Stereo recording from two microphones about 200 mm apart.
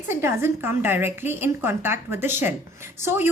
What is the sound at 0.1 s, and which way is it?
A woman's voice, 10° right (ahead or behind).